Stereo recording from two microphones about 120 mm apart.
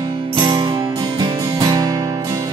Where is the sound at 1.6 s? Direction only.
30° right (ahead or behind).